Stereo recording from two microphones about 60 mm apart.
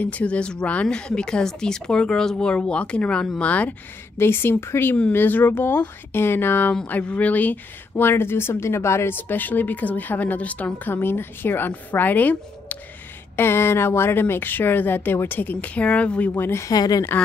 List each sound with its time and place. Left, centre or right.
0.0 s speech: left
4.2 s speech: left
6.9 s speech: left
7.9 s speech: left
9.1 s speech: left
13.4 s speech: left
16.3 s speech: left
16.6 s speech: left